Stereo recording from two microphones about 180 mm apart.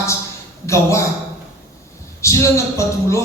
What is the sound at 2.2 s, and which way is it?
Speech, 15° left (ahead or behind).